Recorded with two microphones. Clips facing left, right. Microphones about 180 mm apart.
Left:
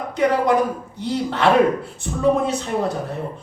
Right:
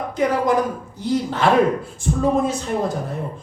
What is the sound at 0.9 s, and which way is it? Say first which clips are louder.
A woman's voice: right 2 dB; 65° left (ahead or behind).